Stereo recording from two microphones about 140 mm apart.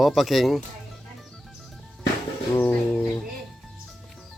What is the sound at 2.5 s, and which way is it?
Speech, 15° left (ahead or behind).